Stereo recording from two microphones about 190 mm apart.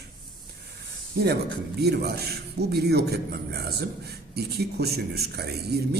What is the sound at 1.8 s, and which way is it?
A man's voice, 60° right (ahead or behind).